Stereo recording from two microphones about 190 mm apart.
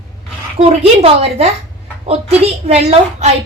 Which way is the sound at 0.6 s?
30° right (ahead or behind).